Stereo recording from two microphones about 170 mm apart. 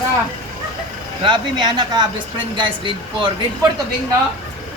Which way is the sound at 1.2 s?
30° right (ahead or behind).